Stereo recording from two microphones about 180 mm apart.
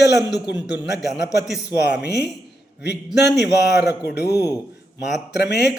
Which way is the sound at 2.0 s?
70° left (ahead or behind).